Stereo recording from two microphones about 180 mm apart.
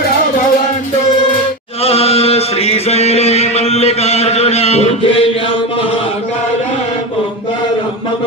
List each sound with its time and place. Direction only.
1.8 s chant: 35° left (ahead or behind)